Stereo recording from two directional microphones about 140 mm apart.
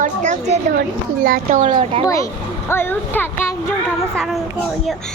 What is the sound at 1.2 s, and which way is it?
Speech, 75° right (ahead or behind).